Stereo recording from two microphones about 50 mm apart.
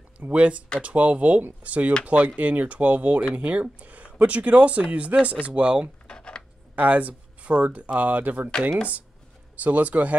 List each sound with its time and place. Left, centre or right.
0.2 s speech: right
5.1 s speech: right
5.5 s speech: centre
6.0 s a sound: centre
6.7 s speech: right
9.6 s speech: right